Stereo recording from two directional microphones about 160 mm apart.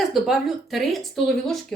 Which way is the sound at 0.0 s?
Centre (ahead or behind).